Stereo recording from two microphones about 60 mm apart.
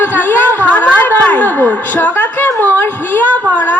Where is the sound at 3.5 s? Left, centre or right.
Left.